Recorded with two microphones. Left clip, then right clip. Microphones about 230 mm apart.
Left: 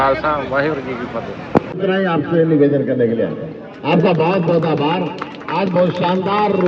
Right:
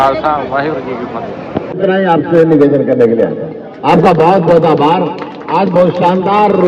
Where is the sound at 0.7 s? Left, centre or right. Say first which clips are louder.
Right 4 dB; centre.